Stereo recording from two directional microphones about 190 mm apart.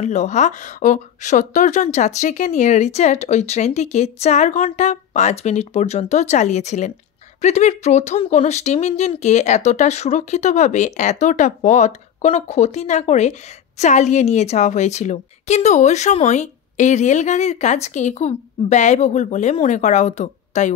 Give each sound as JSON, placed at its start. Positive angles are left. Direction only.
{"t": 0.0, "sound": "speech", "side_deg": 40}